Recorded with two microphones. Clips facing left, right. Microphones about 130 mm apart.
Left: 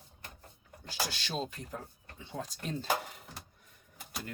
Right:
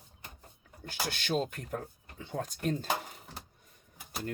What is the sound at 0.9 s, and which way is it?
Speech, 55° right (ahead or behind).